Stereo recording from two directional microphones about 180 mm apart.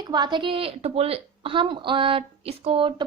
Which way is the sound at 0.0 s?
25° right (ahead or behind).